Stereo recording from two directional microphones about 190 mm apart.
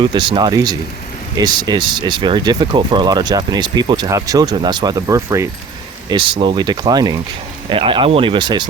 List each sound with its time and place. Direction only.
0.0 s speech: 25° right (ahead or behind)